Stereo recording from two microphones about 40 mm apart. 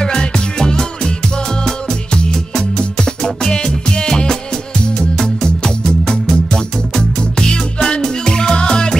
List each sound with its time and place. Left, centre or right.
0.0 s music: centre
3.4 s music: centre
6.3 s music: left